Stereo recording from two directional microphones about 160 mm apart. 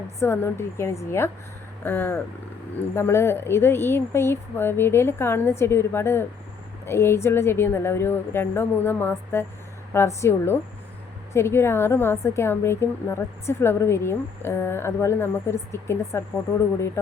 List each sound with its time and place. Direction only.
0.2 s a woman's voice: 15° left (ahead or behind)